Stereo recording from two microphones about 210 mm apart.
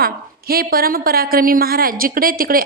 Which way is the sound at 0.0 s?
45° right (ahead or behind).